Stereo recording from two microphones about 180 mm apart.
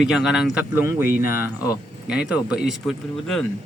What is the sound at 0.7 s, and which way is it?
Speech, 15° right (ahead or behind).